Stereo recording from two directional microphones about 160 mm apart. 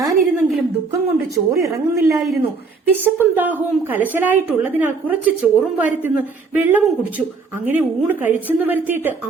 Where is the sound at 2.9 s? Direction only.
10° right (ahead or behind).